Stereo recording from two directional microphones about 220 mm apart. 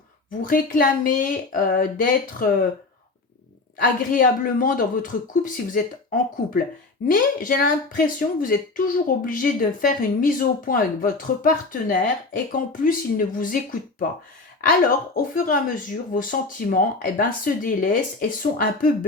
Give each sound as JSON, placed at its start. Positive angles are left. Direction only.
{"t": 0.4, "sound": "speech", "side_deg": 40}
{"t": 3.8, "sound": "speech", "side_deg": 40}